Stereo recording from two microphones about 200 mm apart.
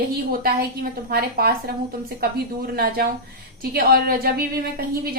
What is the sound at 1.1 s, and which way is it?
A woman's voice, 50° right (ahead or behind).